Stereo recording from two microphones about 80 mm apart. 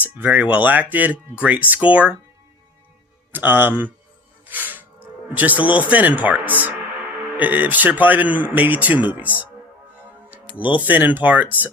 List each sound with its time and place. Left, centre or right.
0.0 s speech: right
3.3 s speech: right
10.5 s speech: centre